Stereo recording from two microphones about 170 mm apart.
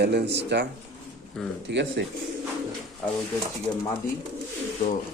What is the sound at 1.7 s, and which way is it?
Speech, 90° right.